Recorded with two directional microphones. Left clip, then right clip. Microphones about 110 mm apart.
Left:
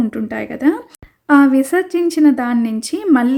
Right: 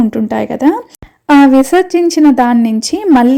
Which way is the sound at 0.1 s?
35° right (ahead or behind).